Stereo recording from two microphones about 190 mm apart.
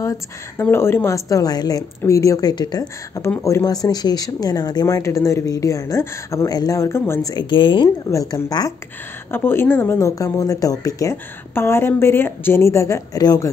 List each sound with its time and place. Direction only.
0.0 s speech: 15° left (ahead or behind)